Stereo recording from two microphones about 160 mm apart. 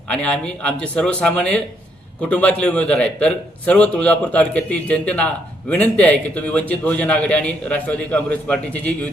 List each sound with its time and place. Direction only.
0.1 s a man's voice: 5° left (ahead or behind)